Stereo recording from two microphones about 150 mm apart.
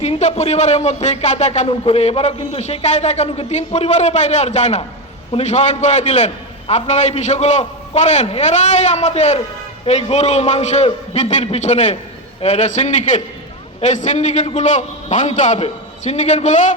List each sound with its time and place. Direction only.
0.0 s speech: 50° left (ahead or behind)